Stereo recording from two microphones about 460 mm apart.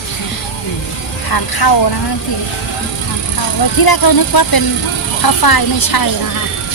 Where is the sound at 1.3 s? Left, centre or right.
Left.